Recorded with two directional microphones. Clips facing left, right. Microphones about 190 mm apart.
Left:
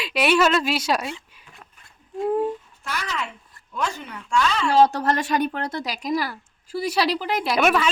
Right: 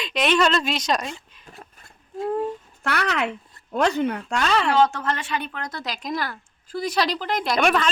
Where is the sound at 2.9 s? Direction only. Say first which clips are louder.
Right 6 dB; 65° right (ahead or behind).